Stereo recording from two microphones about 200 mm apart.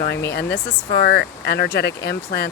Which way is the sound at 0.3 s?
55° left (ahead or behind).